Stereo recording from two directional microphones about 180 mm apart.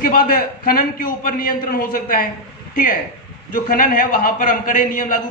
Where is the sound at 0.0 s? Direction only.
55° left (ahead or behind).